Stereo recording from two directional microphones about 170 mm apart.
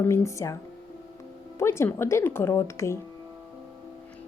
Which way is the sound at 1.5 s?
15° left (ahead or behind).